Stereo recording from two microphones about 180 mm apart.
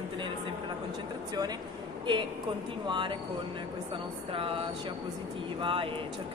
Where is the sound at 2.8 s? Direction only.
25° right (ahead or behind).